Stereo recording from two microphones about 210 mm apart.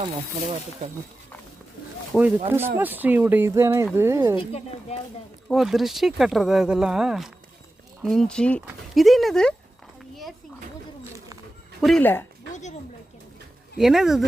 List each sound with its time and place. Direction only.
0.0 s speech: 30° right (ahead or behind)
2.1 s speech: centre (ahead or behind)
4.4 s speech: 30° left (ahead or behind)
5.5 s speech: centre (ahead or behind)
11.8 s speech: centre (ahead or behind)
13.7 s speech: centre (ahead or behind)